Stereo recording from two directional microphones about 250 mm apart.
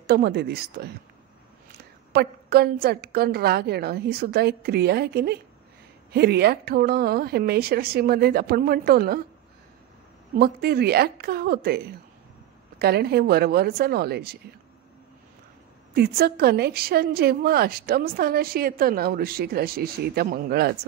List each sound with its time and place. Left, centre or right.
0.0 s a woman's voice: right
2.1 s a woman's voice: right
10.4 s a woman's voice: right
15.9 s a woman's voice: right